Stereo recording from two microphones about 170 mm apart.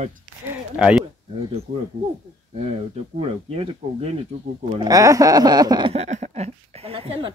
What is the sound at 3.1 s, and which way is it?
A woman's voice, 35° right (ahead or behind).